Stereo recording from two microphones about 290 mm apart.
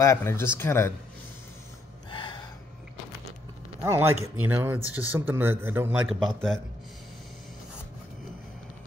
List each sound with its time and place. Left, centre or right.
0.0 s speech: centre
2.0 s gasp: centre
3.8 s a man's voice: centre